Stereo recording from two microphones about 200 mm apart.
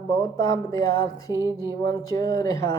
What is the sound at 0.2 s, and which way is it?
Music, 15° left (ahead or behind).